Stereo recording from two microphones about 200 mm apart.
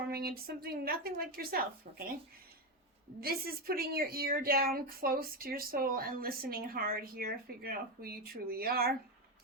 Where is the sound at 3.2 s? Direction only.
50° right (ahead or behind).